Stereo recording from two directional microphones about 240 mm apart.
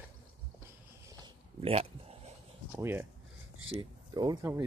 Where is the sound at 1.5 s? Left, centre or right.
Right.